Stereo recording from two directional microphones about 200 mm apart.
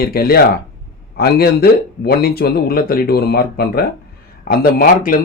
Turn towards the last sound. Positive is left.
turn(degrees=45)  # may be behind; listen again after turning